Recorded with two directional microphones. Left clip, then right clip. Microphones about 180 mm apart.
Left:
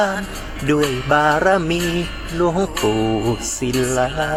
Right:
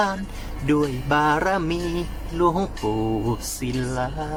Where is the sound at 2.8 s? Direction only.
45° left (ahead or behind).